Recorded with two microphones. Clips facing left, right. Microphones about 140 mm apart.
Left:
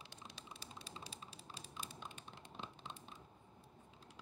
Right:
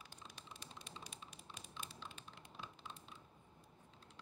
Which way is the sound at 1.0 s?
35° left (ahead or behind).